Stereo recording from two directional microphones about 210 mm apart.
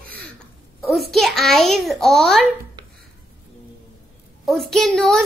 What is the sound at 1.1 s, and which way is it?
A child's voice, centre (ahead or behind).